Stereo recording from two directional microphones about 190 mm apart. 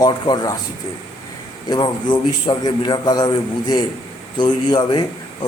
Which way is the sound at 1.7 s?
20° left (ahead or behind).